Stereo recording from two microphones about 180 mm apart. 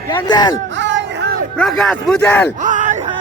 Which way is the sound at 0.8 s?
85° right.